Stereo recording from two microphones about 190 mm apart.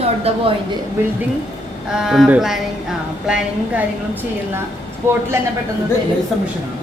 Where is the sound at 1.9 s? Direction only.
5° right (ahead or behind).